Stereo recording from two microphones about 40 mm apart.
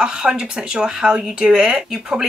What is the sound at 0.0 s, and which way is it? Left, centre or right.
A woman's voice, centre.